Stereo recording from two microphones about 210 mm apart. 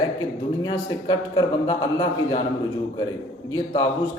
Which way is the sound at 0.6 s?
20° left (ahead or behind).